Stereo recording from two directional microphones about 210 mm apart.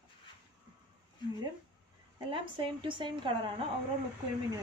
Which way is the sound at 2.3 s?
25° right (ahead or behind).